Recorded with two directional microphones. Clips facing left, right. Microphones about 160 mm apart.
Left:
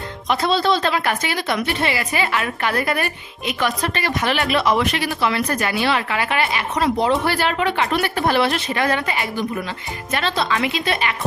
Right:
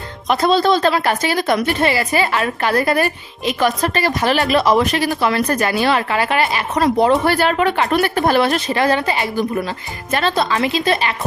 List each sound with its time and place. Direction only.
0.3 s a woman's voice: 45° right (ahead or behind)